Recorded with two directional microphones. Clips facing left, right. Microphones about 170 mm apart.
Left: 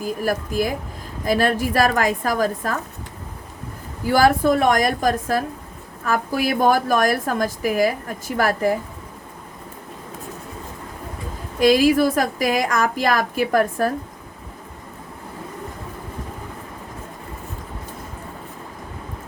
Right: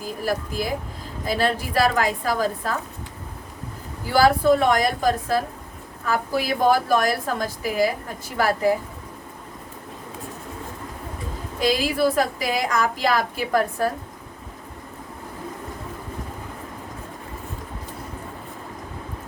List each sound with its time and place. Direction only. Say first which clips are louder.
0.0 s a woman's voice: left 3 dB; 50° left (ahead or behind)
4.0 s a woman's voice: left 1 dB; 45° left (ahead or behind)
11.6 s a woman's voice: left 6 dB; 45° left (ahead or behind)